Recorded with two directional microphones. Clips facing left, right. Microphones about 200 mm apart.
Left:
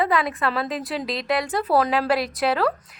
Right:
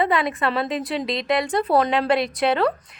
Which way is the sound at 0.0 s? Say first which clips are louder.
Right 1 dB; centre (ahead or behind).